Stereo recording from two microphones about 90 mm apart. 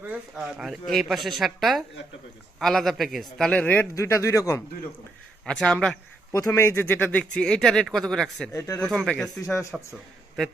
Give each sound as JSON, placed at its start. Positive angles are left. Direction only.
{"t": 0.1, "sound": "speech", "side_deg": -10}
{"t": 3.5, "sound": "speech", "side_deg": 15}
{"t": 3.9, "sound": "speech", "side_deg": 35}
{"t": 5.5, "sound": "speech", "side_deg": 10}
{"t": 6.3, "sound": "speech", "side_deg": 35}
{"t": 8.5, "sound": "speech", "side_deg": 35}
{"t": 8.8, "sound": "speech", "side_deg": 5}
{"t": 9.4, "sound": "speech", "side_deg": 35}